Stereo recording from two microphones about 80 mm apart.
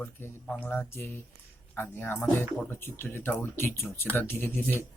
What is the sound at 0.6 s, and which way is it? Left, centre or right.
Speech, left.